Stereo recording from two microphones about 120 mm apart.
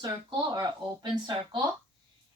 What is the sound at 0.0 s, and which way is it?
Speech, 35° right (ahead or behind).